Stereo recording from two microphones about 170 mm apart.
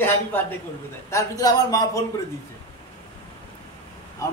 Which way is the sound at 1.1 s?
20° left (ahead or behind).